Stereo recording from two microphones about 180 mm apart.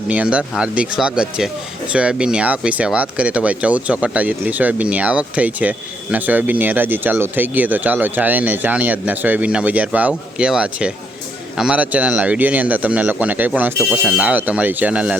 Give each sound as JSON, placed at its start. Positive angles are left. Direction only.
{"t": 0.1, "sound": "speech", "side_deg": -5}